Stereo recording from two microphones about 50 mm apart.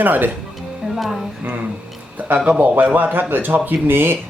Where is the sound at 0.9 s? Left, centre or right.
Centre.